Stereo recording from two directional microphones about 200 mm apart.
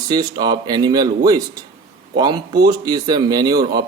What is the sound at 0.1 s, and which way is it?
Speech, 20° right (ahead or behind).